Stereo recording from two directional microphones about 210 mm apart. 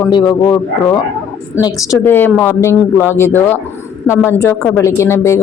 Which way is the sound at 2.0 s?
10° left (ahead or behind).